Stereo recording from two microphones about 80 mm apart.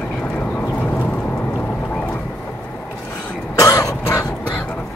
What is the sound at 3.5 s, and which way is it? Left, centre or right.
Cough, left.